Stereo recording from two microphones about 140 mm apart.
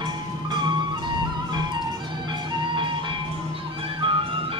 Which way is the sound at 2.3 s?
35° right (ahead or behind).